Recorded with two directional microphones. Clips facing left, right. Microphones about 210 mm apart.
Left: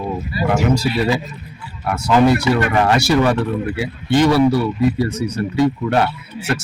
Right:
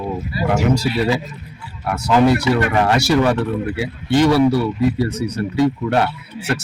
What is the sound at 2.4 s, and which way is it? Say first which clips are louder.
Speech: even; 30° right (ahead or behind).